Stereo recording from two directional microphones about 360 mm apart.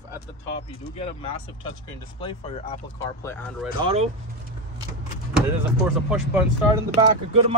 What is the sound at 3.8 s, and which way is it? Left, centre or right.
Speech, centre.